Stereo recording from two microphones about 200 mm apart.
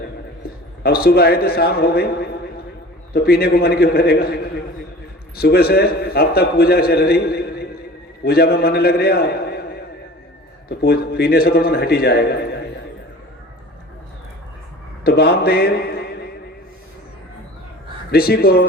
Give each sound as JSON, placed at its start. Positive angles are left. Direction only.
{"t": 0.4, "sound": "a man's voice", "side_deg": 50}
{"t": 5.4, "sound": "a man's voice", "side_deg": 50}
{"t": 10.7, "sound": "a man's voice", "side_deg": 50}
{"t": 15.0, "sound": "a man's voice", "side_deg": 50}
{"t": 18.1, "sound": "a man's voice", "side_deg": 50}